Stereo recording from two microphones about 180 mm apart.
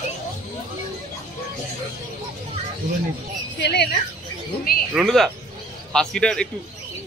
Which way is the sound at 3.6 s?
65° left (ahead or behind).